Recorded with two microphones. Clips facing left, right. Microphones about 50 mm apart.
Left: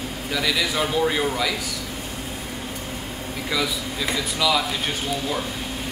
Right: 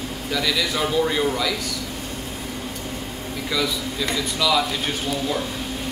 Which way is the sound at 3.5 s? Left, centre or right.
Centre.